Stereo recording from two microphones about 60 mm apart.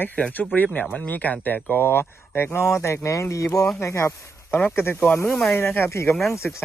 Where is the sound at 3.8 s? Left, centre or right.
Left.